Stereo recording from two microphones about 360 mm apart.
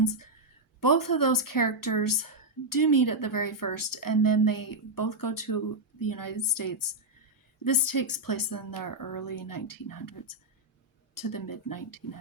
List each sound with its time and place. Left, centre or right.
0.0 s a woman's voice: left